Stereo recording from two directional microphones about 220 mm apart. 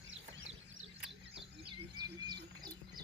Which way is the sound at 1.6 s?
20° right (ahead or behind).